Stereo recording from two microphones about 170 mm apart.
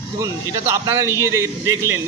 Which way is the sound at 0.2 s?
15° right (ahead or behind).